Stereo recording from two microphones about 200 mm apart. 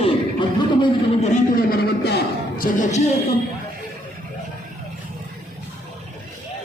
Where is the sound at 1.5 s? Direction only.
50° left (ahead or behind).